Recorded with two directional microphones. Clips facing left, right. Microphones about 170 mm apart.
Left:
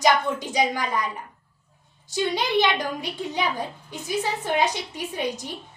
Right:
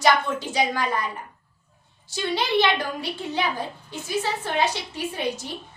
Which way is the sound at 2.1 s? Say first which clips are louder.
Even; 15° left (ahead or behind).